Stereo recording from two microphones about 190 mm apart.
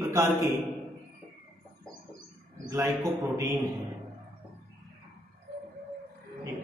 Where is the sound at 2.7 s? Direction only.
15° right (ahead or behind).